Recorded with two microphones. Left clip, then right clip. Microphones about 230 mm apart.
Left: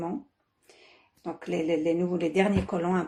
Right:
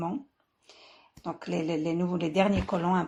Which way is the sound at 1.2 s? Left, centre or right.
Right.